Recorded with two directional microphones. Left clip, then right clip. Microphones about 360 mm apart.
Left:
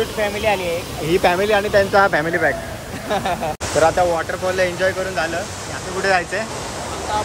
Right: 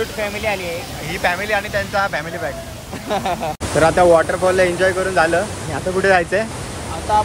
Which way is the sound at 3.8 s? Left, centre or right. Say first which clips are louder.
Right 2 dB; centre.